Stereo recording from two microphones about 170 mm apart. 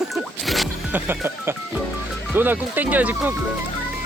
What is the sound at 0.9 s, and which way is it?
Speech, 15° right (ahead or behind).